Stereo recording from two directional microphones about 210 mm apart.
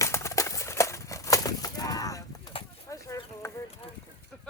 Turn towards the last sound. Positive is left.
turn(degrees=15)  # may be behind; listen again after turning